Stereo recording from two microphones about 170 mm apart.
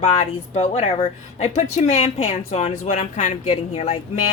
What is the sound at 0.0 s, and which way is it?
Speech, 40° left (ahead or behind).